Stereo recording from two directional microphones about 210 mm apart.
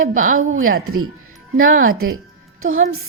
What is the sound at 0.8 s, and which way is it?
Speech, 90° right.